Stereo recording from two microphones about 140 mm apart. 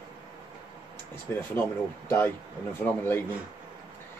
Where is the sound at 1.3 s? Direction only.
15° left (ahead or behind).